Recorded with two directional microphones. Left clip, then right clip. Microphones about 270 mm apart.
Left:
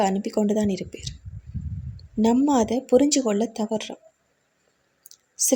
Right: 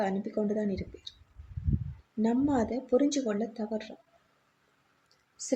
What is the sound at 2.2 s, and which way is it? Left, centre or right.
Speech, left.